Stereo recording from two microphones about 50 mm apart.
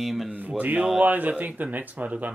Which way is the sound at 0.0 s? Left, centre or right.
Centre.